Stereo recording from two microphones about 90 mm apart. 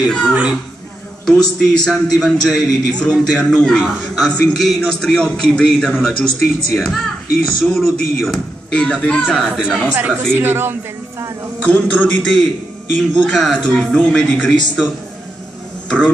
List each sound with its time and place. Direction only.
0.3 s speech: 15° right (ahead or behind)
1.2 s a man's voice: 5° left (ahead or behind)
9.6 s speech: 10° right (ahead or behind)
10.3 s speech: 25° right (ahead or behind)
11.6 s a man's voice: 15° left (ahead or behind)